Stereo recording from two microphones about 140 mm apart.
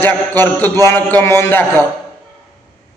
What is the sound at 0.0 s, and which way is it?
A man's voice, 15° left (ahead or behind).